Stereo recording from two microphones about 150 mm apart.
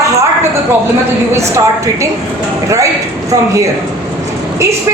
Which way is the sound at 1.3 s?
20° right (ahead or behind).